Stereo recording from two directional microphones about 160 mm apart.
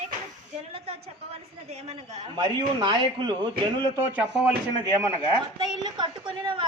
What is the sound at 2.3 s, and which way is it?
Speech, 30° right (ahead or behind).